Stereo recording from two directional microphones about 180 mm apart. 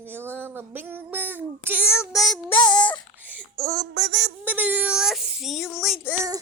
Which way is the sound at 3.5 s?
20° right (ahead or behind).